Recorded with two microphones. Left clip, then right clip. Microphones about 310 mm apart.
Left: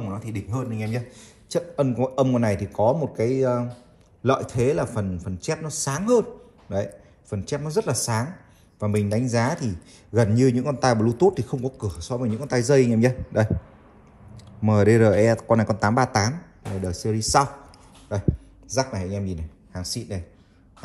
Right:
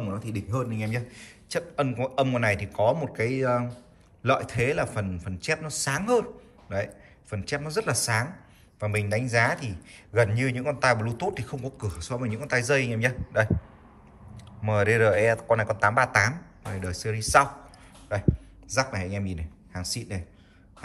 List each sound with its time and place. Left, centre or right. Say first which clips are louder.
0.1 s speech: even; centre
1.1 s a man's voice: left 4 dB; centre
18.8 s a man's voice: left 2 dB; centre